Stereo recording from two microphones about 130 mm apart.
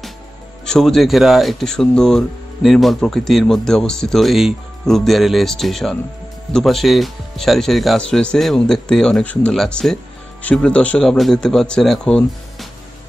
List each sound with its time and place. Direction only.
0.7 s speech: centre (ahead or behind)